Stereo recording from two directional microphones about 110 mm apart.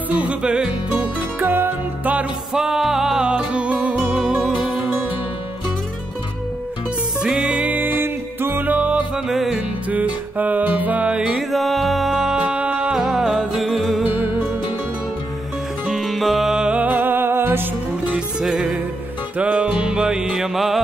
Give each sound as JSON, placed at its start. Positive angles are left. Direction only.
{"t": 0.1, "sound": "music", "side_deg": -10}
{"t": 1.4, "sound": "music", "side_deg": -20}
{"t": 7.2, "sound": "music", "side_deg": -5}
{"t": 10.3, "sound": "music", "side_deg": -15}
{"t": 15.9, "sound": "music", "side_deg": 0}
{"t": 18.1, "sound": "music", "side_deg": -5}